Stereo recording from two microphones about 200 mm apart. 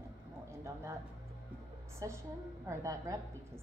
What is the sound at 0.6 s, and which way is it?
A woman's voice, 15° right (ahead or behind).